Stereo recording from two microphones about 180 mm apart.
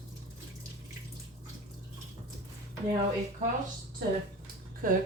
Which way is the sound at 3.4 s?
40° right (ahead or behind).